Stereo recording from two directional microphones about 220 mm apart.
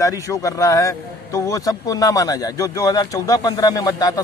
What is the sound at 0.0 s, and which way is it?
Speech, 15° left (ahead or behind).